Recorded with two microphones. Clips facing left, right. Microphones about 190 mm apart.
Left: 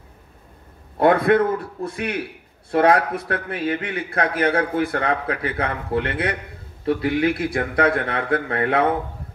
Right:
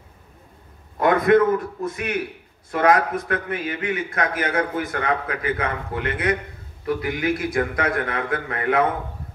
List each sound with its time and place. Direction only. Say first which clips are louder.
0.9 s a man's voice: even; 30° left (ahead or behind)